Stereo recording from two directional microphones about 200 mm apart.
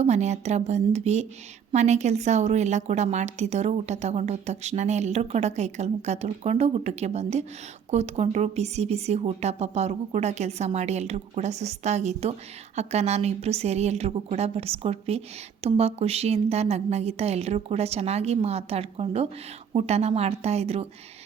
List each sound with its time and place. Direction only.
0.0 s a woman's voice: 35° right (ahead or behind)